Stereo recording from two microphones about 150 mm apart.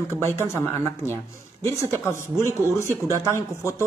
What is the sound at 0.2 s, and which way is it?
A man's voice, 15° left (ahead or behind).